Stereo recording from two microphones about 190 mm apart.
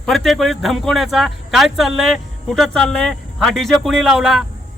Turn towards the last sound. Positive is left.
turn(degrees=0)  # may be behind; listen again after turning